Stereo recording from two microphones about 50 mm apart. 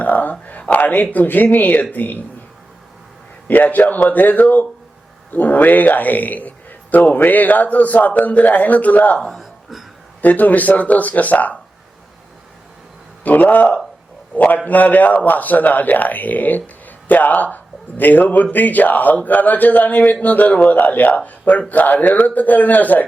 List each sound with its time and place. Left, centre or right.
0.0 s whispering: left
0.6 s a sound: left
1.1 s a man's voice: left
3.4 s a man's voice: left
9.3 s a sound: centre
10.2 s a man's voice: left
13.2 s a man's voice: left